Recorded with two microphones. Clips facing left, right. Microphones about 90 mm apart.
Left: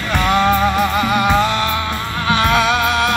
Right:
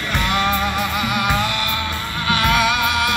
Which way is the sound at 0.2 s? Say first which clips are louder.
Left 6 dB; 35° left (ahead or behind).